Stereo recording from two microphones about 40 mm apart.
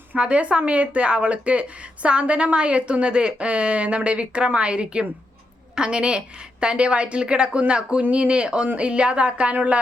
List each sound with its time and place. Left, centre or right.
0.2 s speech: right